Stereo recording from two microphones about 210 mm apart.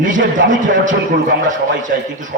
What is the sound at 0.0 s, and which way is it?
A man's voice, 40° right (ahead or behind).